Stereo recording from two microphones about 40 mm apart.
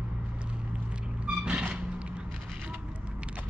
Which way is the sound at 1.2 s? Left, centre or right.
Right.